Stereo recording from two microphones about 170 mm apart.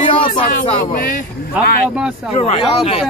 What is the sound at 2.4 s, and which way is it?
Speech, 35° left (ahead or behind).